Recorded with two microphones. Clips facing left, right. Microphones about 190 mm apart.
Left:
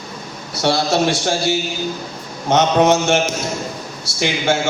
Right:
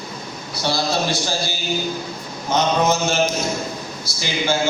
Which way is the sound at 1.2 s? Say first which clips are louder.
Left 7 dB; 70° left (ahead or behind).